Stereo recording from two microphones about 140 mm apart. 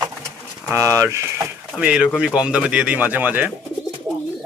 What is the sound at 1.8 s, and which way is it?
Speech, 10° right (ahead or behind).